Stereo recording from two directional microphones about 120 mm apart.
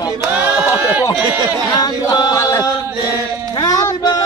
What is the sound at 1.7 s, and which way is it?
Chant, 30° left (ahead or behind).